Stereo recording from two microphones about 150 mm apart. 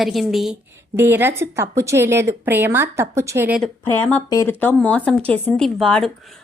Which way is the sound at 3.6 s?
10° left (ahead or behind).